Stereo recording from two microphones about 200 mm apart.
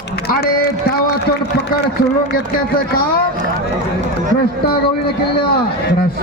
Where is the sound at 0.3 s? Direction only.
50° left (ahead or behind).